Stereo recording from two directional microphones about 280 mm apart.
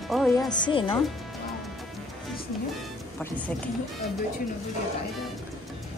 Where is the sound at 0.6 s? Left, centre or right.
Centre.